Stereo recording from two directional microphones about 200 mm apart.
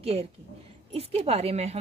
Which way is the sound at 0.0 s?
30° right (ahead or behind).